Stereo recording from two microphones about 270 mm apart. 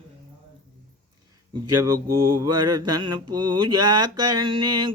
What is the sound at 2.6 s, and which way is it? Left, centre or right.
Mantra, centre.